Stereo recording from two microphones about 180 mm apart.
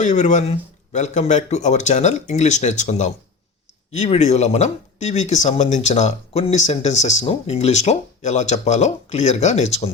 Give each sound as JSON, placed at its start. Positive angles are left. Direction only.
{"t": 0.0, "sound": "speech", "side_deg": 40}